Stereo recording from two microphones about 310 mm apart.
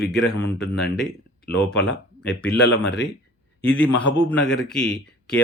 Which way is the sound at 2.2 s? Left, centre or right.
Centre.